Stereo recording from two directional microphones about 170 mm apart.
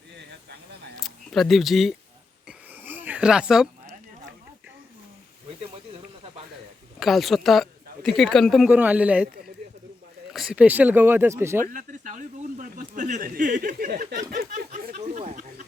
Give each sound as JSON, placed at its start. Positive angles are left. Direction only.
{"t": 0.9, "sound": "speech", "side_deg": 0}
{"t": 2.5, "sound": "a sound", "side_deg": -10}
{"t": 7.0, "sound": "speech", "side_deg": 0}
{"t": 8.7, "sound": "speech", "side_deg": -10}
{"t": 10.3, "sound": "speech", "side_deg": -5}
{"t": 11.7, "sound": "a sound", "side_deg": -50}